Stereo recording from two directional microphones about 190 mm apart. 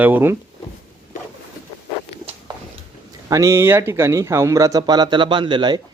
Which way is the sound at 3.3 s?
15° right (ahead or behind).